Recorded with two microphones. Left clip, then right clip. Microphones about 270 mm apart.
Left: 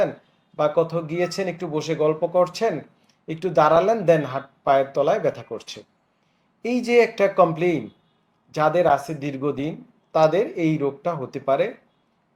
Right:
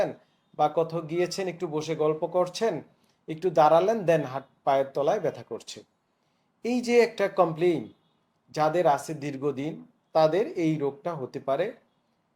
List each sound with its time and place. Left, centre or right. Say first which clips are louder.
0.5 s speech: left 4 dB; centre